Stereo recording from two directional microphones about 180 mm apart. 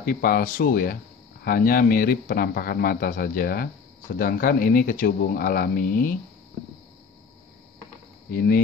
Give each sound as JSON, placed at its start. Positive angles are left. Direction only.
{"t": 0.0, "sound": "a man's voice", "side_deg": 55}
{"t": 8.3, "sound": "speech", "side_deg": 55}